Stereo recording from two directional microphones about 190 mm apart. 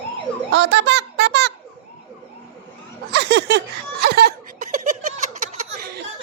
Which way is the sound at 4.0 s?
55° right (ahead or behind).